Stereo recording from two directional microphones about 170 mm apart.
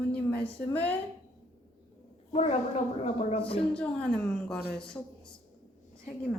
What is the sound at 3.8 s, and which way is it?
Speech, 5° left (ahead or behind).